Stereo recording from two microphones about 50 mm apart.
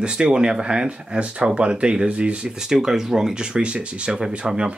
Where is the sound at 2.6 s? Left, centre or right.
Centre.